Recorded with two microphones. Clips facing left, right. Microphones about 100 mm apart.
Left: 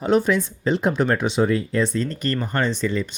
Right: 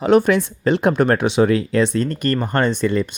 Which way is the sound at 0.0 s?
65° right (ahead or behind).